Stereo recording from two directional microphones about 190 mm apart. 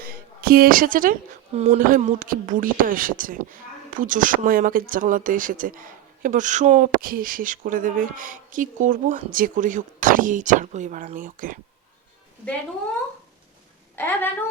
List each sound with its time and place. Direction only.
0.0 s speech: 50° right (ahead or behind)
1.5 s speech: 35° right (ahead or behind)
13.9 s a woman's voice: 10° left (ahead or behind)